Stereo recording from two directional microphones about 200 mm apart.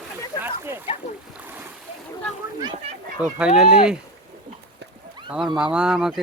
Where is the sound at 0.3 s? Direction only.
10° right (ahead or behind).